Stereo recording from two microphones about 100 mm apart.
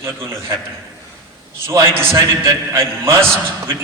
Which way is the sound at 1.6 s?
25° right (ahead or behind).